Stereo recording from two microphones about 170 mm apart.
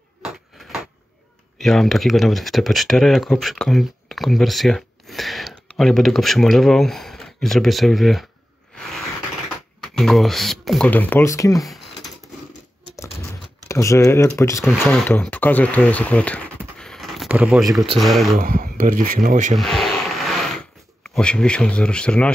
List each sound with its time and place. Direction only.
0.2 s a sound: centre (ahead or behind)
1.6 s speech: centre (ahead or behind)
9.8 s speech: centre (ahead or behind); by 11.6 s 20° left (ahead or behind)
11.6 s typing: centre (ahead or behind)
13.7 s speech: 15° left (ahead or behind); by 18.3 s centre (ahead or behind)
18.3 s speech: 55° right (ahead or behind)
19.5 s vehicle: centre (ahead or behind)
21.0 s speech: 5° left (ahead or behind)